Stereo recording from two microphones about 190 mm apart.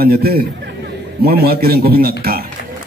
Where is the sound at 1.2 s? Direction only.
55° right (ahead or behind).